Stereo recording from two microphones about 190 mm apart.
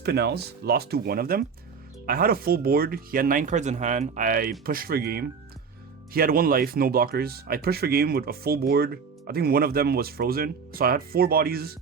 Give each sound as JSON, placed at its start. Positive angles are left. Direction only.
{"t": 0.0, "sound": "speech", "side_deg": -60}